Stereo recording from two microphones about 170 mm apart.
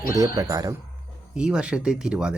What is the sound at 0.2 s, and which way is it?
Speech, 20° right (ahead or behind).